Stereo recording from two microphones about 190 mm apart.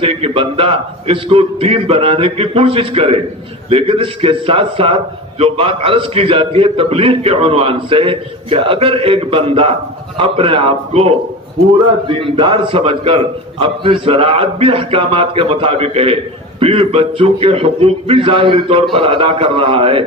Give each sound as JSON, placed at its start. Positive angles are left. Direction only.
{"t": 0.0, "sound": "a man's voice", "side_deg": -30}